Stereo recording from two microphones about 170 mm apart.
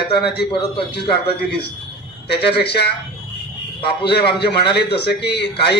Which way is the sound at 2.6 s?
80° left.